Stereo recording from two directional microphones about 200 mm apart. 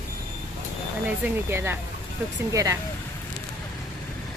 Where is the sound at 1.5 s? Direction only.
10° right (ahead or behind).